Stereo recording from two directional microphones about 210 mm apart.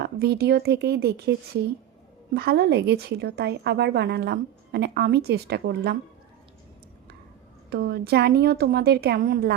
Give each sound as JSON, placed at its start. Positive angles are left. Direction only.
{"t": 0.0, "sound": "a woman's voice", "side_deg": -50}
{"t": 2.3, "sound": "a woman's voice", "side_deg": -50}
{"t": 7.7, "sound": "a woman's voice", "side_deg": -50}